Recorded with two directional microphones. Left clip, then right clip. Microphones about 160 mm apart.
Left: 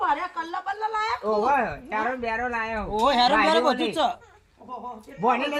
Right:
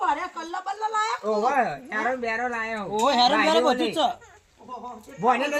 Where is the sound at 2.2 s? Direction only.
15° left (ahead or behind).